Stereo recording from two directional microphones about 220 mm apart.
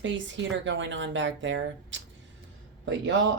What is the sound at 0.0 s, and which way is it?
Speech, 55° right (ahead or behind).